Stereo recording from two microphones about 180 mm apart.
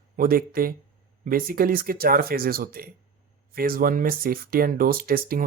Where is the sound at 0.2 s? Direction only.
55° right (ahead or behind).